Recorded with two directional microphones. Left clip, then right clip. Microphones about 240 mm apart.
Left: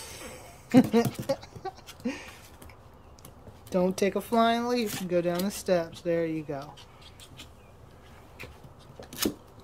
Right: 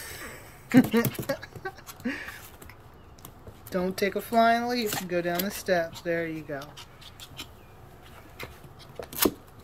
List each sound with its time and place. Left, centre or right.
0.0 s a sound: centre
3.7 s speech: centre
6.6 s speech: centre